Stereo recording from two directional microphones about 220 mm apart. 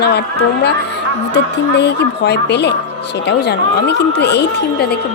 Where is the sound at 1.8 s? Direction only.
50° left (ahead or behind).